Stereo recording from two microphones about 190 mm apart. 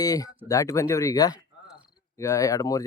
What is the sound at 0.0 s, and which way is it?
Speech, 20° left (ahead or behind).